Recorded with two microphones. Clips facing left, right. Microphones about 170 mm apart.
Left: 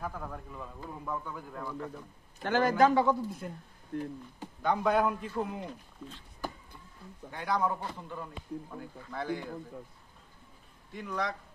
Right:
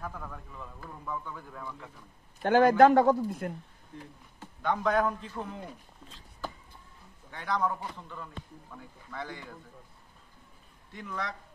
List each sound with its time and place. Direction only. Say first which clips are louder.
0.0 s a man's voice: left 2 dB; 5° left (ahead or behind)
2.4 s a man's voice: right 5 dB; 55° right (ahead or behind)
3.9 s speech: left 11 dB; 60° left (ahead or behind)
4.6 s a man's voice: even; 5° left (ahead or behind)
7.2 s a man's voice: even; 10° left (ahead or behind)
10.9 s a man's voice: left 3 dB; centre (ahead or behind)